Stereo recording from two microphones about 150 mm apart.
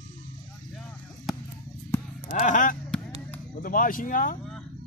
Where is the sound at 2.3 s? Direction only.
60° left (ahead or behind).